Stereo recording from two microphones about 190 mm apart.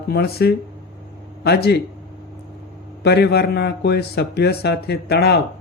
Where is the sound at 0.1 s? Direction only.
55° left (ahead or behind).